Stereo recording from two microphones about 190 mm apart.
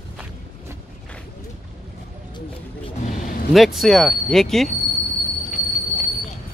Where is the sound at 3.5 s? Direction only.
Centre (ahead or behind).